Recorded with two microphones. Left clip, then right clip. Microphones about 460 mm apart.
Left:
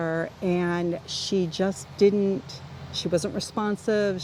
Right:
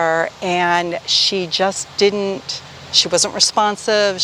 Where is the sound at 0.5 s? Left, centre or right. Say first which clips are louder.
Right 12 dB; right.